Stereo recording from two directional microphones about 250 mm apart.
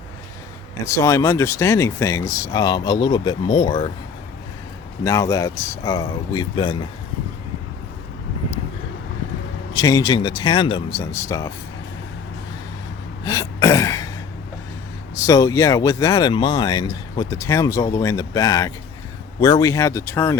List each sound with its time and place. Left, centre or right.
0.9 s speech: centre
5.0 s speech: centre
9.7 s speech: centre
13.2 s throat clearing: centre
15.1 s speech: centre